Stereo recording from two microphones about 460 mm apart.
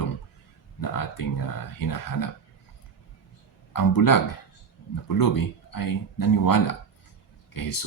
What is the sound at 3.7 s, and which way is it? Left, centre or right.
Speech, left.